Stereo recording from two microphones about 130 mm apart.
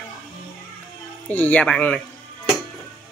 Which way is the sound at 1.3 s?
10° left (ahead or behind).